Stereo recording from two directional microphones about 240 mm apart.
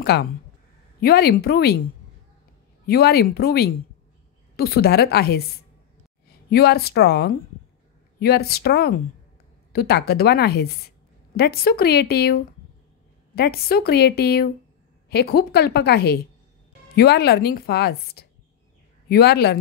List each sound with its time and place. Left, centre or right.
0.0 s speech: left
2.9 s speech: left
6.5 s speech: left